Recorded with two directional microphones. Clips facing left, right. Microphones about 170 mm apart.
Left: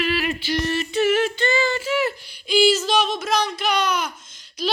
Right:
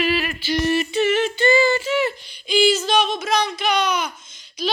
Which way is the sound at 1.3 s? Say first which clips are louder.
Right 5 dB; 10° right (ahead or behind).